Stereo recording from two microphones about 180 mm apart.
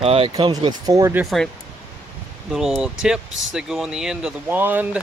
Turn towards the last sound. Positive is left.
turn(degrees=-10)  # may be behind; listen again after turning